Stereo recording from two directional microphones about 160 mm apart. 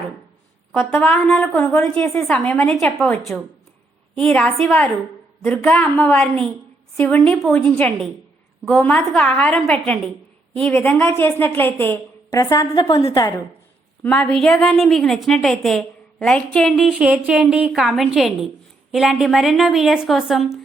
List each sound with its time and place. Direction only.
0.8 s a woman's voice: 10° left (ahead or behind)
12.3 s a woman's voice: 25° left (ahead or behind)
14.0 s a woman's voice: 5° left (ahead or behind)